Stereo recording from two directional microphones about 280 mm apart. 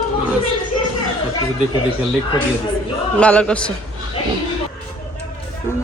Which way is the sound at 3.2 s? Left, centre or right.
Centre.